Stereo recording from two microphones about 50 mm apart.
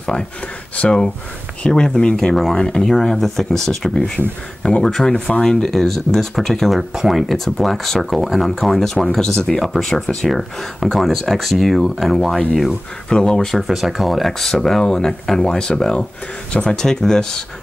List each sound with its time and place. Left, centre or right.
0.7 s speech: centre
5.8 s speech: centre
6.8 s speech: centre
13.1 s speech: centre
13.6 s speech: centre
14.4 s speech: centre